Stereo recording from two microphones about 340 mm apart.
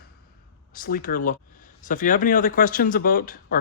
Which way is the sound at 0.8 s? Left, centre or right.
Left.